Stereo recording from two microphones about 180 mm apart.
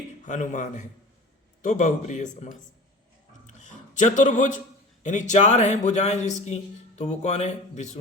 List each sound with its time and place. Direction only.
0.3 s speech: 45° left (ahead or behind)
3.6 s a man's voice: 40° left (ahead or behind)